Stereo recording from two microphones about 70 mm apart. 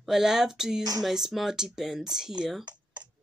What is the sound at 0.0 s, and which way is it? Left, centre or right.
A woman's voice, centre.